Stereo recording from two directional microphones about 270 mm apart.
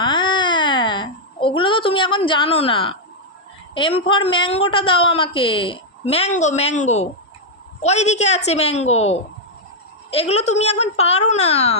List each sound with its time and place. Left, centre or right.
0.0 s baby cry: centre
3.8 s a woman's voice: centre